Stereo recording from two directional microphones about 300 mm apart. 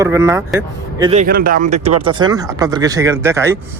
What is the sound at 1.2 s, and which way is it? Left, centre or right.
Speech, right.